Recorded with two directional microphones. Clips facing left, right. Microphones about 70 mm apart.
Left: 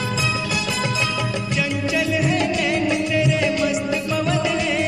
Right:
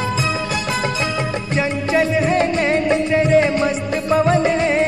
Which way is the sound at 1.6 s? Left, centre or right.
Right.